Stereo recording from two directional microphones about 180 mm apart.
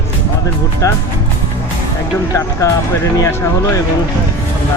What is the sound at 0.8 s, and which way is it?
Speech, 15° left (ahead or behind).